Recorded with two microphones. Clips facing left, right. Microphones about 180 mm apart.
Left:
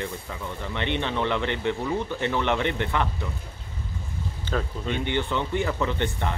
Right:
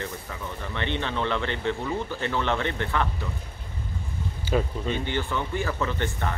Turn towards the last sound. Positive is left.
turn(degrees=20)  # may be behind; listen again after turning